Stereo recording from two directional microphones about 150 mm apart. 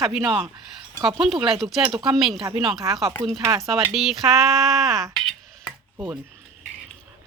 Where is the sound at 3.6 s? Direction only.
Centre (ahead or behind).